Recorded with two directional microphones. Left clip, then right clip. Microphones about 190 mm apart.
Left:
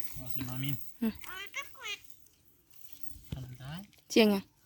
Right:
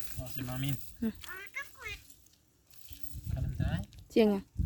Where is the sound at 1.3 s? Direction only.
45° left (ahead or behind).